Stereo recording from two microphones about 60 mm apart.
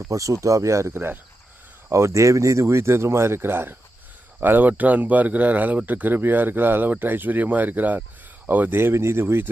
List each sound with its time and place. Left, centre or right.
0.0 s speech: right
0.9 s speech: right
1.9 s speech: right